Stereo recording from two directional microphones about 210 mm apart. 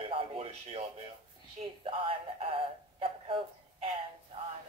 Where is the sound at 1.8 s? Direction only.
25° right (ahead or behind).